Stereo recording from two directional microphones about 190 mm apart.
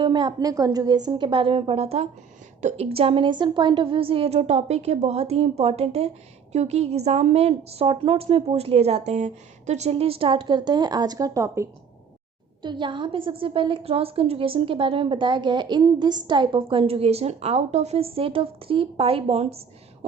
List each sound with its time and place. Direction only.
0.0 s a woman's voice: 25° right (ahead or behind)